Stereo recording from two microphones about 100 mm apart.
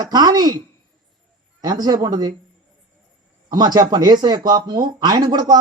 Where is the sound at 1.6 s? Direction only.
40° right (ahead or behind).